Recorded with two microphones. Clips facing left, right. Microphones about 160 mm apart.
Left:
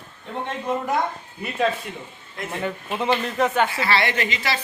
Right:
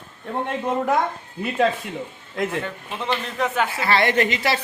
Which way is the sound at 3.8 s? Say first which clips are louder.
Right 3 dB; 50° right (ahead or behind).